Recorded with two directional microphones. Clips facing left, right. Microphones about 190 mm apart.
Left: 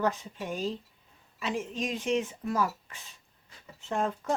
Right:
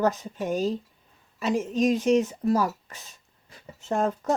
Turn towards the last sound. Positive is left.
turn(degrees=-40)  # may be behind; listen again after turning